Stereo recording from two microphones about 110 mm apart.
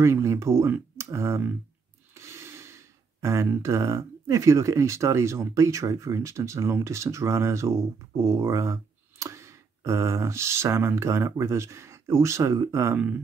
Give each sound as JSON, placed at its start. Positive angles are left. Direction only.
{"t": 0.0, "sound": "speech", "side_deg": -25}